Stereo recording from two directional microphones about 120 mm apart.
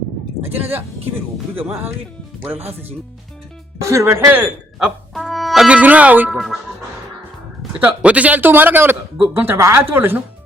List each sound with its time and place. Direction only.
0.4 s a man's voice: 15° right (ahead or behind)
3.8 s speech: 25° right (ahead or behind)
5.1 s brass instrument: centre (ahead or behind)
6.3 s speech: centre (ahead or behind)
7.8 s a man's voice: 10° right (ahead or behind)